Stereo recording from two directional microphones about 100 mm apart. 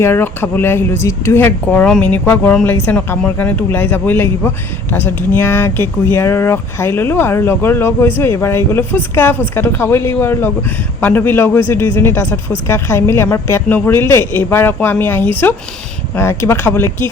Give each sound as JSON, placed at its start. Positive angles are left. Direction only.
{"t": 0.0, "sound": "speech", "side_deg": 25}